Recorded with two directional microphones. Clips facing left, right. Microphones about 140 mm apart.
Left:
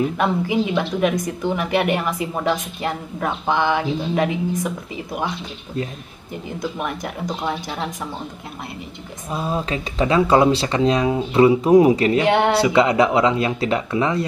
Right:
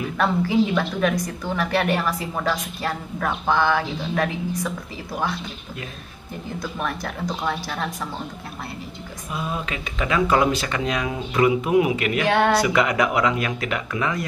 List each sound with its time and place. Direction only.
0.2 s a woman's voice: 20° left (ahead or behind)
6.6 s a woman's voice: 20° left (ahead or behind)
9.3 s a woman's voice: 35° left (ahead or behind)